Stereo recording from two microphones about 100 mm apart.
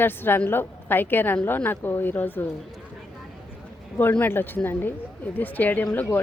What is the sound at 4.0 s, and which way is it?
A woman's voice, 20° left (ahead or behind).